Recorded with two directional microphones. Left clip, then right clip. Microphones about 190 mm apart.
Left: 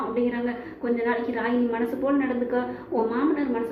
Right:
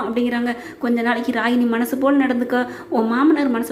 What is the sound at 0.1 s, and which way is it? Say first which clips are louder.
A woman's voice: right 5 dB; 45° right (ahead or behind).